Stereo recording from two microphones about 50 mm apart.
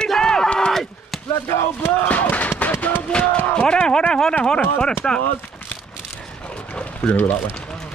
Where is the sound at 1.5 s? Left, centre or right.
Left.